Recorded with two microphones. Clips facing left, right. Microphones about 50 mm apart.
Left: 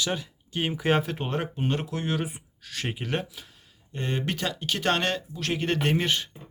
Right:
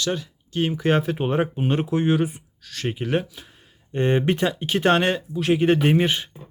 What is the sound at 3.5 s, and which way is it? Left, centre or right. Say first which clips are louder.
Speech: right 10 dB; right.